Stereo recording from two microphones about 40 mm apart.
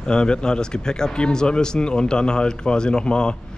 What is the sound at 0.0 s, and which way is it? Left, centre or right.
A man's voice, left.